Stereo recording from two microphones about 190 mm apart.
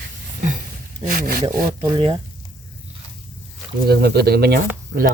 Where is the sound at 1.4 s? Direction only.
25° right (ahead or behind).